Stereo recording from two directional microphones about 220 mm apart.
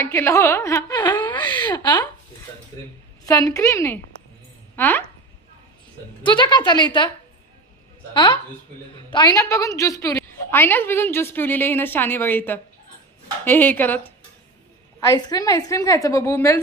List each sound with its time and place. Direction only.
0.0 s a woman's voice: 10° left (ahead or behind)
1.6 s a woman's voice: 20° left (ahead or behind)
3.2 s a woman's voice: 15° left (ahead or behind)
6.2 s a woman's voice: 20° left (ahead or behind)
8.1 s a woman's voice: 20° left (ahead or behind)